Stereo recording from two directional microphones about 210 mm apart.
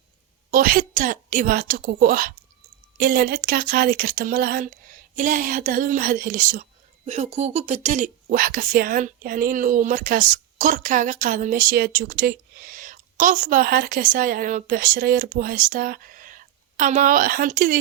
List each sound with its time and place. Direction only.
0.5 s speech: 40° right (ahead or behind)